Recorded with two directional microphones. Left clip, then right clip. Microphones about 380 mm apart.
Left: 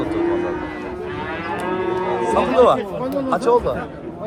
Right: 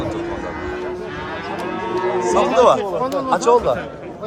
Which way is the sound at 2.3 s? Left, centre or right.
Centre.